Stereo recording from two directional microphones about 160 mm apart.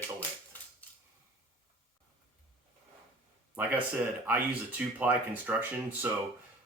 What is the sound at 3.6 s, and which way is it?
Speech, 10° right (ahead or behind).